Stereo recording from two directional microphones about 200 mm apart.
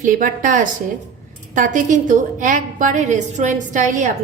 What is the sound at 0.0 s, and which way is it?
A woman's voice, 40° right (ahead or behind).